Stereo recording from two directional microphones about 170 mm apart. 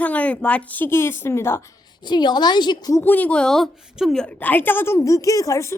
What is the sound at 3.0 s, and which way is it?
A woman's voice, 10° left (ahead or behind).